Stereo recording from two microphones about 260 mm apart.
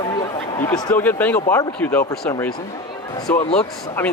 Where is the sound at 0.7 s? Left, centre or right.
Centre.